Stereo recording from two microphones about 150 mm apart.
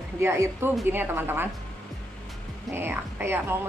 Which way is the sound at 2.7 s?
15° right (ahead or behind).